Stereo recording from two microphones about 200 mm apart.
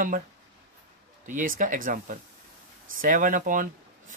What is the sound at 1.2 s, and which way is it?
Speech, 40° right (ahead or behind).